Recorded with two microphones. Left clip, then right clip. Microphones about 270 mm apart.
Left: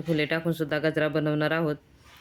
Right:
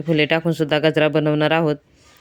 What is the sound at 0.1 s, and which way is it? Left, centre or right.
A man's voice, right.